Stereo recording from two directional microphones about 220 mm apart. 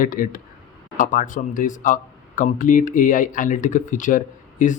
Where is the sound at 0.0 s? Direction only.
40° left (ahead or behind).